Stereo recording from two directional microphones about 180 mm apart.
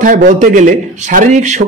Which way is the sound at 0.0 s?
45° right (ahead or behind).